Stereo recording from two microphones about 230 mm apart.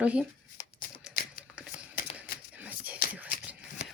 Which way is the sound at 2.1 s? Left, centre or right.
Centre.